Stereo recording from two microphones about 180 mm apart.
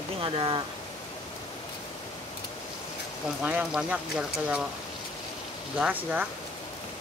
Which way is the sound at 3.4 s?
10° right (ahead or behind).